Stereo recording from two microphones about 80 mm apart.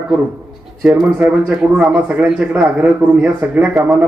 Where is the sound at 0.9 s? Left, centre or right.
Centre.